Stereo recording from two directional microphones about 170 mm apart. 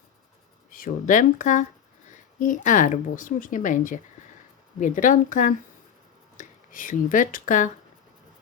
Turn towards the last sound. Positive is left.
turn(degrees=50)  # may be behind; listen again after turning